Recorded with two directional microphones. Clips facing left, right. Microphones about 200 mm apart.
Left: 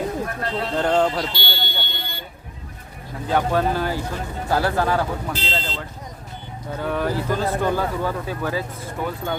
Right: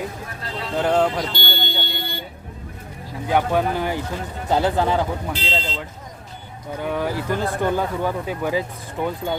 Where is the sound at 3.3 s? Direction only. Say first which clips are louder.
Right 1 dB; 15° right (ahead or behind).